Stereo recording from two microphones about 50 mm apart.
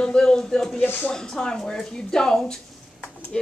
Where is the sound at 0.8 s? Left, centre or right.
Left.